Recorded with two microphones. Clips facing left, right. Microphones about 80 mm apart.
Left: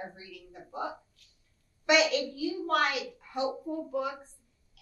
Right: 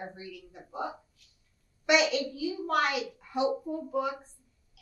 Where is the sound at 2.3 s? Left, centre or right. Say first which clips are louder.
Even; centre.